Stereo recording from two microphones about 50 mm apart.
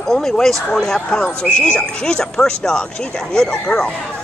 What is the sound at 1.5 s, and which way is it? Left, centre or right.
Speech, left.